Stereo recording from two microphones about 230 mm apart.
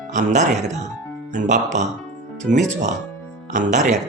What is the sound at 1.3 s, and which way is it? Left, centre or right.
Speech, right.